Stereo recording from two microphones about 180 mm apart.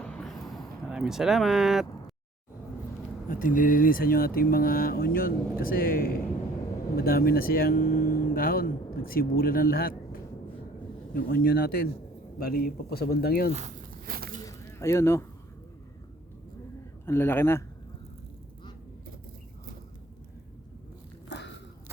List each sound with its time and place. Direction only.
0.0 s a sound: 5° left (ahead or behind)
3.2 s speech: 50° left (ahead or behind)
13.5 s speech: 40° right (ahead or behind)
14.1 s speech: 55° right (ahead or behind)
14.4 s a sound: 15° left (ahead or behind)
17.1 s a man's voice: 10° left (ahead or behind)
21.2 s walk: 75° left (ahead or behind)